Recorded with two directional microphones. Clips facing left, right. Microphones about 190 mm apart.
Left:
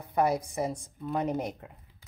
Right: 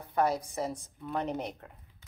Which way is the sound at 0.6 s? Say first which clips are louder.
Left 3 dB; 15° left (ahead or behind).